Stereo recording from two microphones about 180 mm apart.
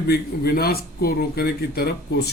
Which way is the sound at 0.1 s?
60° left (ahead or behind).